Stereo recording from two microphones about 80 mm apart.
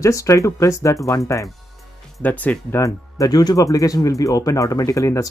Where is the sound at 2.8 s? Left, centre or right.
Left.